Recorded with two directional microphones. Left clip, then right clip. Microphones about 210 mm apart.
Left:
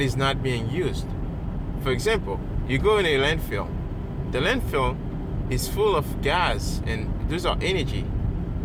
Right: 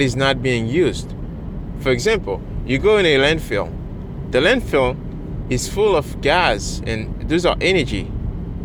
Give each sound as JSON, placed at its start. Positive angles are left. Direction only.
{"t": 0.0, "sound": "speech", "side_deg": -40}